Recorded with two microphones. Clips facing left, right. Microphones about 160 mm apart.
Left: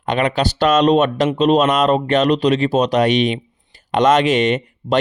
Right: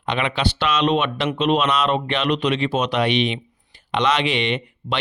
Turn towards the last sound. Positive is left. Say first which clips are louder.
# left 7 dB
turn(degrees=45)  # may be behind; listen again after turning